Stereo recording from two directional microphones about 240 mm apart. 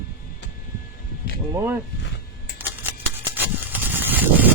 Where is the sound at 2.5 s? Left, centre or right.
Centre.